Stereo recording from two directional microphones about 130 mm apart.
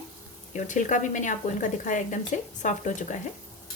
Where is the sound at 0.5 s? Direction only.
75° left (ahead or behind).